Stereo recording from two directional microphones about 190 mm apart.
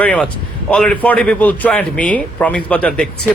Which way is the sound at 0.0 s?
5° left (ahead or behind).